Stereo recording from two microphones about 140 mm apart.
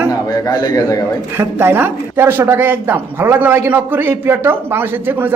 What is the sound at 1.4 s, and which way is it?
Speech, 15° right (ahead or behind).